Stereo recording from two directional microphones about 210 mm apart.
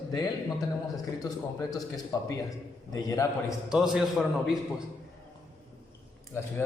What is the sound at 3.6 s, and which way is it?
A man's voice, 5° right (ahead or behind).